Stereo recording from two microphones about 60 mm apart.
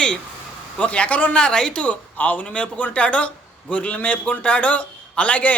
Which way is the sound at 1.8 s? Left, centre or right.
Left.